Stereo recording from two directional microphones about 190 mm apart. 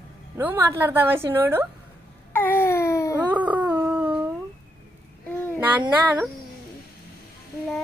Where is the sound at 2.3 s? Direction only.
10° left (ahead or behind).